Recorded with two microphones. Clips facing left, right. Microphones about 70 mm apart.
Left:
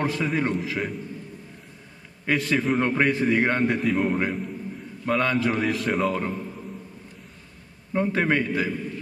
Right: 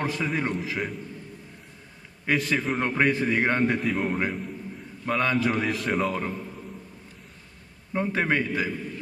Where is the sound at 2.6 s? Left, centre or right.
Centre.